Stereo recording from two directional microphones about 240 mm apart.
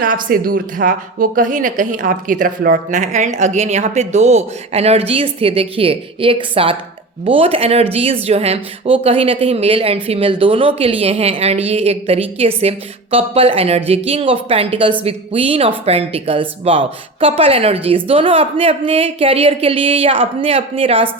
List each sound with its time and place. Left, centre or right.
0.0 s speech: right